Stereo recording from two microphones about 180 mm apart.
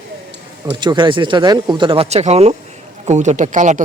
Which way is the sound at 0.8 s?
25° right (ahead or behind).